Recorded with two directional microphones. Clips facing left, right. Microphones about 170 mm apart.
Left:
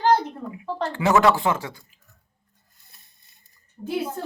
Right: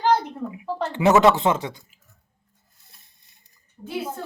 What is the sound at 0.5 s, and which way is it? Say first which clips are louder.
Speech: even; 20° right (ahead or behind).